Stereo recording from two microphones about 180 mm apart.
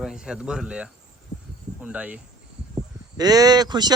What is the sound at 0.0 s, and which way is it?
Speech, 5° right (ahead or behind).